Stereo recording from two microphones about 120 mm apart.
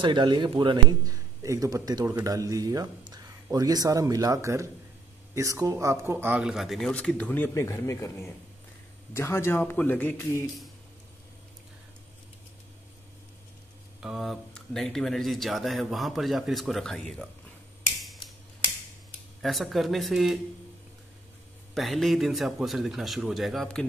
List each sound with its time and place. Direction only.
0.0 s a man's voice: 40° right (ahead or behind); by 6.9 s centre (ahead or behind)
6.9 s speech: 10° left (ahead or behind)
14.0 s speech: centre (ahead or behind)
19.4 s speech: centre (ahead or behind)
21.7 s speech: centre (ahead or behind)